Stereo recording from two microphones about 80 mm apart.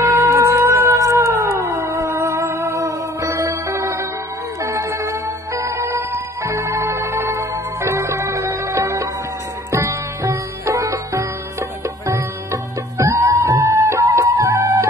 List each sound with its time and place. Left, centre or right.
0.2 s music: right
12.9 s music: right